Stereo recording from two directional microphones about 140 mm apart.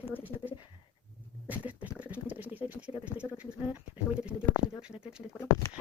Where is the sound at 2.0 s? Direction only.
10° right (ahead or behind).